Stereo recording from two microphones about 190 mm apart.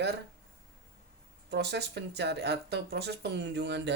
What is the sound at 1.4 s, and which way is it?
Speech, 60° right (ahead or behind).